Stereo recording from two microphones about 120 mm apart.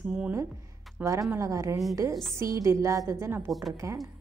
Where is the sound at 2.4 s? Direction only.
25° right (ahead or behind).